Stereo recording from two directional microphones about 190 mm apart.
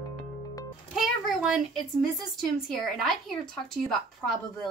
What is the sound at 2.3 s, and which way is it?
A woman's voice, centre (ahead or behind).